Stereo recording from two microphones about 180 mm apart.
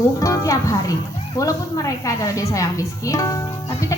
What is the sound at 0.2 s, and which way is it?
A woman's voice, 20° left (ahead or behind).